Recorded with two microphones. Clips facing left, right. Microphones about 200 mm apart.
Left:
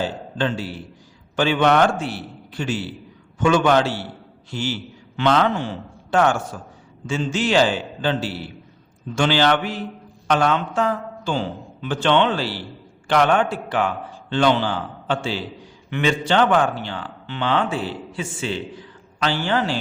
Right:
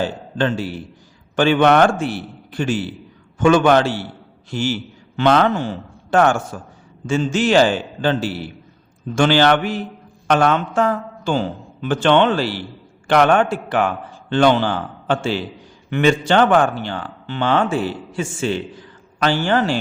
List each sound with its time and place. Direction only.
0.3 s a man's voice: 50° right (ahead or behind)